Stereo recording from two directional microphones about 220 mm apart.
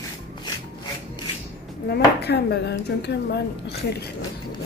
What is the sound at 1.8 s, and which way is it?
Dishes, 50° left (ahead or behind).